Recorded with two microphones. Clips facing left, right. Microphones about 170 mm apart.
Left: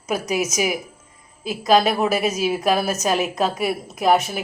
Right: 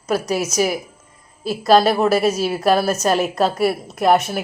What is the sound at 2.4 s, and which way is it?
Speech, 10° left (ahead or behind).